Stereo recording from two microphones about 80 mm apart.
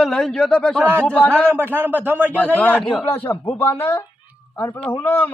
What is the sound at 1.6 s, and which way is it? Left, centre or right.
Speech, right.